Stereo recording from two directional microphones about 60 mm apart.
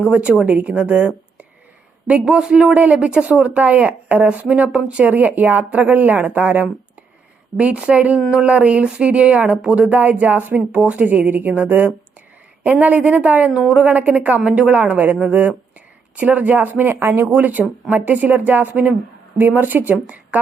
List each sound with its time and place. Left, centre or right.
0.1 s speech: centre
2.0 s speech: centre; by 17.0 s right
17.0 s speech: right
17.3 s speech: right